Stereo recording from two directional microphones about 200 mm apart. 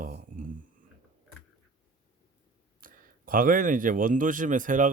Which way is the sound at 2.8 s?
45° right (ahead or behind).